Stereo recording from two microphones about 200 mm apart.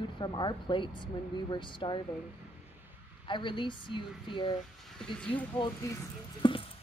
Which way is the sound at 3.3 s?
25° left (ahead or behind).